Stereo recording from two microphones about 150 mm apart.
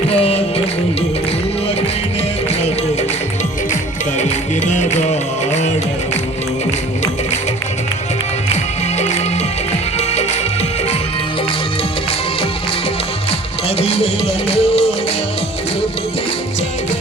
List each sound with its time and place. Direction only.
0.1 s music: 40° left (ahead or behind)
4.2 s music: 50° left (ahead or behind)
9.0 s music: 50° left (ahead or behind)
13.7 s music: 40° left (ahead or behind)